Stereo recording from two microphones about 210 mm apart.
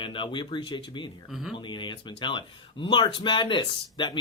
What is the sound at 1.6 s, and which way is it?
Speech, 20° left (ahead or behind).